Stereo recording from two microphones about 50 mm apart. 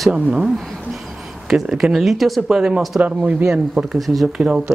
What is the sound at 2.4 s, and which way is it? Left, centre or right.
Speech, centre.